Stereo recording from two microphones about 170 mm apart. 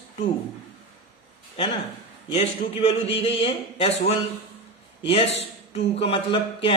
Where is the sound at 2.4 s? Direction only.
40° left (ahead or behind).